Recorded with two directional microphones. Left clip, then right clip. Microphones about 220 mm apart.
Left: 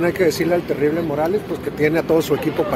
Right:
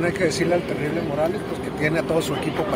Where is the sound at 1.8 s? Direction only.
55° left (ahead or behind).